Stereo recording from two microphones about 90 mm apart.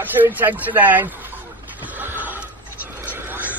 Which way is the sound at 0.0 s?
20° right (ahead or behind).